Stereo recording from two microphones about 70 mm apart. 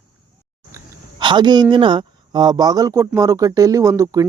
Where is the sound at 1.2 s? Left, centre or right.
Right.